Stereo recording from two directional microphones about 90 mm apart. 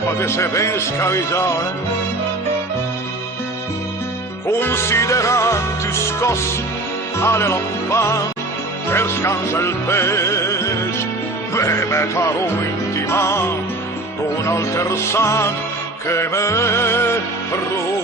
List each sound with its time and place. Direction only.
0.2 s music: 30° left (ahead or behind)
4.4 s music: 25° left (ahead or behind)